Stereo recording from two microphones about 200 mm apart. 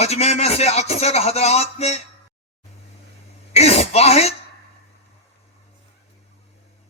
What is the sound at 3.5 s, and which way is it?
Throat clearing, 30° left (ahead or behind).